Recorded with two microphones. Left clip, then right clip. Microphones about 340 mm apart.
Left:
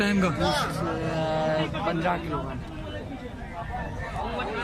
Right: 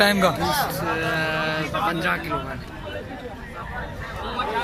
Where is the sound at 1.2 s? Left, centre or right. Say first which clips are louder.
Right 2 dB; centre.